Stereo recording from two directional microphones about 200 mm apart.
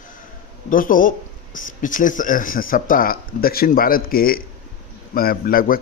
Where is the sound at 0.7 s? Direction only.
45° left (ahead or behind).